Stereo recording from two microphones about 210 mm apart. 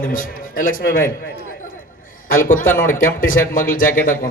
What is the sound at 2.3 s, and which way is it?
A man's voice, 40° left (ahead or behind).